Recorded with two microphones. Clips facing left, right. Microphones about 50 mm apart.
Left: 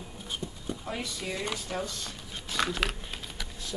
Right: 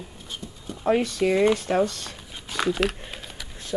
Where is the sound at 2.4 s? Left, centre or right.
Centre.